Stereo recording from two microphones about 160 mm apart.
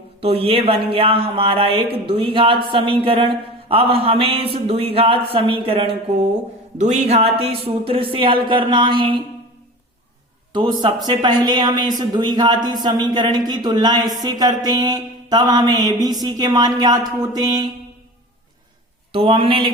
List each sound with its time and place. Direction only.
0.2 s speech: 35° right (ahead or behind)
6.7 s speech: 45° right (ahead or behind); by 9.1 s 30° right (ahead or behind)
10.5 s speech: 30° right (ahead or behind)
19.1 s speech: 35° right (ahead or behind)